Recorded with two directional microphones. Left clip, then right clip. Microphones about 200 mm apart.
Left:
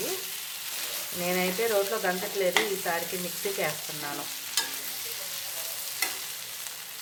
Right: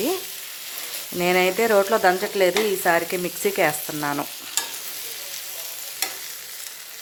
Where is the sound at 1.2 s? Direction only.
65° right (ahead or behind).